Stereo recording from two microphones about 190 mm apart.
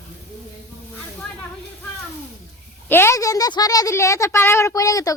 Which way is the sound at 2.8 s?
10° left (ahead or behind).